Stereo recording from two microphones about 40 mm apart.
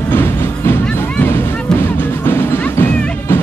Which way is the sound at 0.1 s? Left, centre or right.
Left.